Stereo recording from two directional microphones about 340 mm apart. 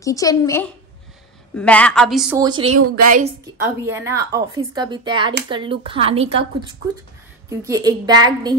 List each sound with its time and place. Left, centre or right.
0.0 s a woman's voice: centre
3.0 s a woman's voice: right
3.8 s speech: centre
7.4 s speech: centre